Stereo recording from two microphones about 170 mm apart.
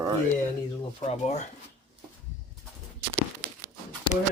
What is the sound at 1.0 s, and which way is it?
Speech, 40° left (ahead or behind).